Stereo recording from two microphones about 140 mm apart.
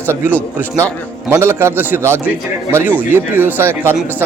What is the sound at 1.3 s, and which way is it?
Speech, 20° right (ahead or behind).